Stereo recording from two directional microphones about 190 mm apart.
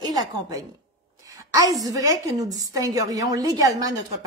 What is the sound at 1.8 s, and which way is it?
A woman's voice, 20° right (ahead or behind).